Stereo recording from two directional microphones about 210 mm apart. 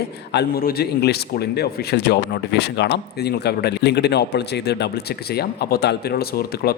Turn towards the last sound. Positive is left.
turn(degrees=45)  # may be behind; listen again after turning